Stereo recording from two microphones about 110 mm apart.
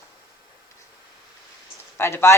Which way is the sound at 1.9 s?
20° left (ahead or behind).